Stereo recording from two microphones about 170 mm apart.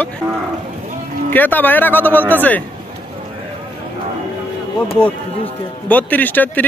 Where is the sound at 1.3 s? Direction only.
10° left (ahead or behind).